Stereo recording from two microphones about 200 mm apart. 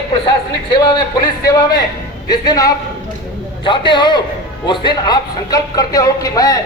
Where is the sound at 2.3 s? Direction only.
20° left (ahead or behind).